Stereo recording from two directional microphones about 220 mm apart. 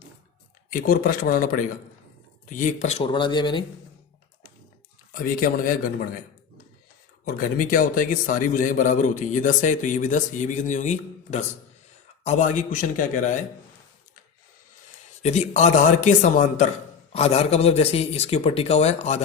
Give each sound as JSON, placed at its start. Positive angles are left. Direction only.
{"t": 0.7, "sound": "a man's voice", "side_deg": 40}
{"t": 5.1, "sound": "a man's voice", "side_deg": 40}
{"t": 7.3, "sound": "a man's voice", "side_deg": 40}
{"t": 15.2, "sound": "a man's voice", "side_deg": 30}